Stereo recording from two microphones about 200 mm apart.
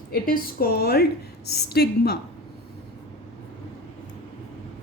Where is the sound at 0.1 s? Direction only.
45° left (ahead or behind).